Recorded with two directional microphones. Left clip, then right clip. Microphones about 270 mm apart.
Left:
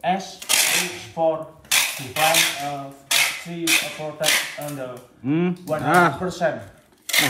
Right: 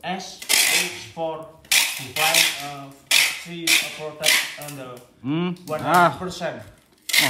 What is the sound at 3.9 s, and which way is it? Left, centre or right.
Cutlery, centre.